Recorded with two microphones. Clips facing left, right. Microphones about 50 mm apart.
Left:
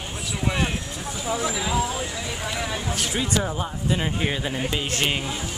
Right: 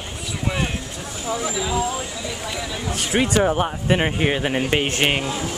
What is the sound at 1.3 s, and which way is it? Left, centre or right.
Speech, centre.